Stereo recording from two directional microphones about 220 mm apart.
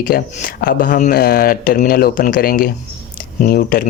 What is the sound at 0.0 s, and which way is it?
Speech, 40° left (ahead or behind).